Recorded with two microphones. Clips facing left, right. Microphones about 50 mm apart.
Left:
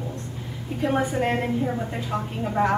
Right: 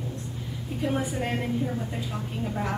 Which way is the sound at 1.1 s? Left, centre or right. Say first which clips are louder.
Left 5 dB; left.